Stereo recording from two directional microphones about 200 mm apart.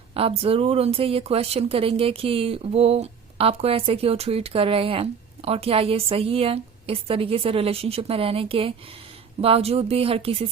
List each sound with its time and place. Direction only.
0.1 s speech: 30° right (ahead or behind)